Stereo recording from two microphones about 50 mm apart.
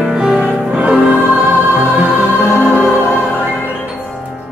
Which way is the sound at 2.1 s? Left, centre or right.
Right.